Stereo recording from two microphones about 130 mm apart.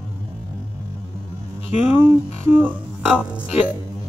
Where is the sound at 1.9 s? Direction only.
15° right (ahead or behind).